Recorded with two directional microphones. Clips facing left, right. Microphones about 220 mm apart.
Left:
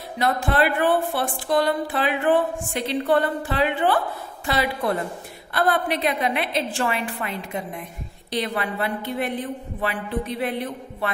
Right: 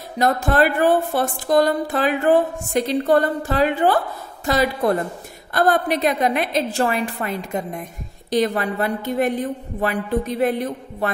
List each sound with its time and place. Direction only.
0.2 s speech: 45° right (ahead or behind)